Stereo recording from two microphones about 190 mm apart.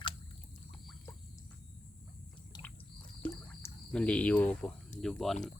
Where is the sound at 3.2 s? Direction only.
5° left (ahead or behind).